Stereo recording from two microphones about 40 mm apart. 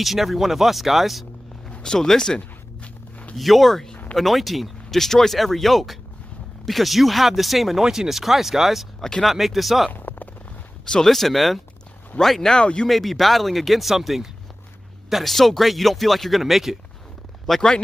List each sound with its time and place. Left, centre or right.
0.0 s speech: centre
1.9 s speech: centre
2.8 s walk: left
3.3 s speech: centre
7.8 s speech: centre
9.9 s a sound: left
10.9 s speech: centre
17.6 s speech: left